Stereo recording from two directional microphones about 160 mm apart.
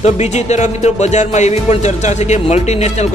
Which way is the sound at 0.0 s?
45° left (ahead or behind).